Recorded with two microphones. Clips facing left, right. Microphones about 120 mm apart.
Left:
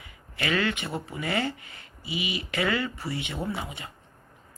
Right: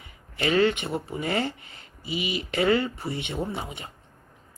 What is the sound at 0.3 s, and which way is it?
Speech, 30° right (ahead or behind).